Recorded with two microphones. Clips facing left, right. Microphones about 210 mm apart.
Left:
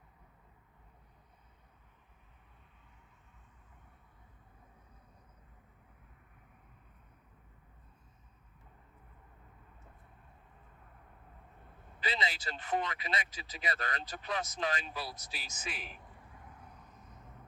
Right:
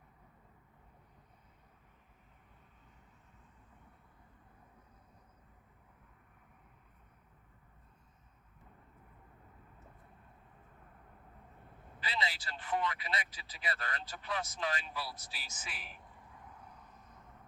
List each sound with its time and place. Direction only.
11.9 s speech: 20° left (ahead or behind)